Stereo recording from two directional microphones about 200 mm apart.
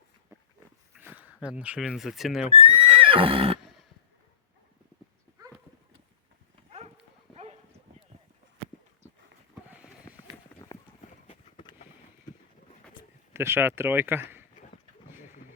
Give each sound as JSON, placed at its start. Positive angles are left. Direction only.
{"t": 0.3, "sound": "a sound", "side_deg": -15}
{"t": 0.9, "sound": "speech", "side_deg": -10}
{"t": 2.5, "sound": "horse", "side_deg": -25}
{"t": 6.7, "sound": "dog", "side_deg": -30}
{"t": 9.6, "sound": "a sound", "side_deg": -5}
{"t": 11.3, "sound": "vehicle", "side_deg": 25}
{"t": 13.3, "sound": "speech", "side_deg": -10}